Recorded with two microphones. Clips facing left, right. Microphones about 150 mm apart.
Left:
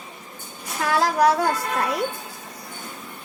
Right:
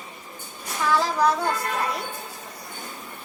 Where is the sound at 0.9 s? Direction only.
75° left (ahead or behind).